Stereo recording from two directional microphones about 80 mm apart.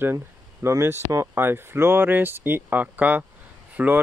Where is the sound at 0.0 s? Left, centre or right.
Right.